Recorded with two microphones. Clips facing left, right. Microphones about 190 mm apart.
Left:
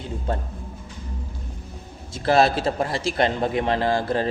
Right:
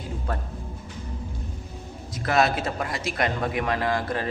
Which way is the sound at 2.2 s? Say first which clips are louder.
Left 4 dB; 30° left (ahead or behind).